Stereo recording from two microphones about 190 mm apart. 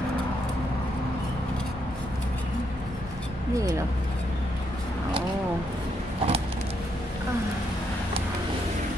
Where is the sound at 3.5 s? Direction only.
15° right (ahead or behind).